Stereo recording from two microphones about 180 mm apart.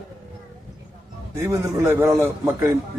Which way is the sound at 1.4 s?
15° right (ahead or behind).